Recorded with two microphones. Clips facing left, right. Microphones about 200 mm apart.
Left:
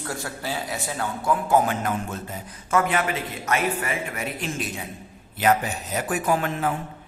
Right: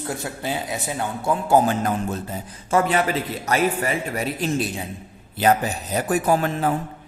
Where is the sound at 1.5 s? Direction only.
30° right (ahead or behind).